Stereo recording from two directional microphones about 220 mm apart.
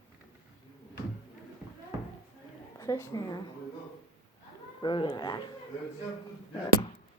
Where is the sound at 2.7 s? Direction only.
15° left (ahead or behind).